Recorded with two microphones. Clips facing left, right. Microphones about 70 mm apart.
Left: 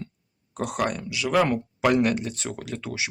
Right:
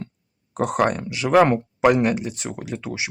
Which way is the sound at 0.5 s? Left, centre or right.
Right.